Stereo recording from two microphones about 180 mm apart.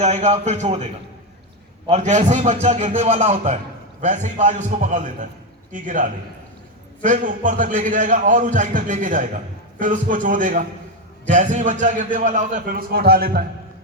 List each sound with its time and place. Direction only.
0.0 s a man's voice: 40° right (ahead or behind)
1.9 s a man's voice: 40° right (ahead or behind)